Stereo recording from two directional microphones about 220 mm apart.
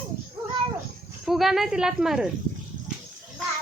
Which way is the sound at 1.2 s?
Centre (ahead or behind).